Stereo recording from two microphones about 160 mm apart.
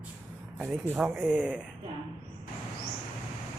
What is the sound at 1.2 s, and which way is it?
Speech, 5° right (ahead or behind).